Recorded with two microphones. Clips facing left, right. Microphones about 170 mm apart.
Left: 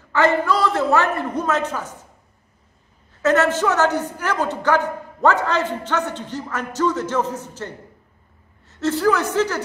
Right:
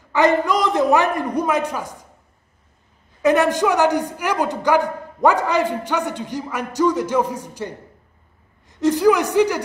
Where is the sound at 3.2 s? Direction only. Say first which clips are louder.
Right 2 dB; 15° right (ahead or behind).